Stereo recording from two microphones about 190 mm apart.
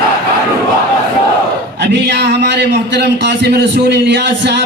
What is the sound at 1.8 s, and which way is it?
A man's voice, 60° right (ahead or behind).